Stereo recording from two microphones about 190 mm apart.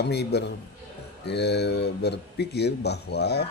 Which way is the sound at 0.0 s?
60° left (ahead or behind).